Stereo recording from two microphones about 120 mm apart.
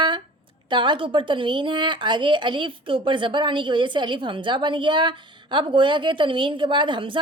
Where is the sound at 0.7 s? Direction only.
40° right (ahead or behind).